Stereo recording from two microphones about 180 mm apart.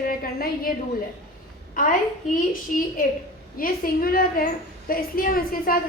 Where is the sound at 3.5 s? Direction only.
55° left (ahead or behind).